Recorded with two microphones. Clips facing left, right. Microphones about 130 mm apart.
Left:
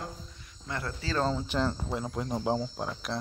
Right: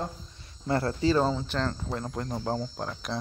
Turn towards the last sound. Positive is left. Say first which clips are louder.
# even
turn(degrees=5)  # may be behind; listen again after turning